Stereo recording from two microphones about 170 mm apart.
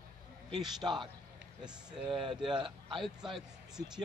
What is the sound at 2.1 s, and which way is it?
Speech, 30° right (ahead or behind).